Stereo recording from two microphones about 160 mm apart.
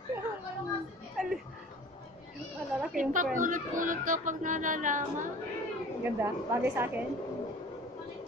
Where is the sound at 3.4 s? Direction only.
55° right (ahead or behind).